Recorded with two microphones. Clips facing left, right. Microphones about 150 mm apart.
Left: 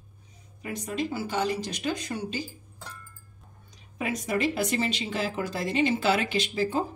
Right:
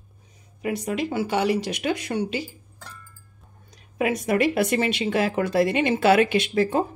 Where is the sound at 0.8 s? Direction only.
70° right (ahead or behind).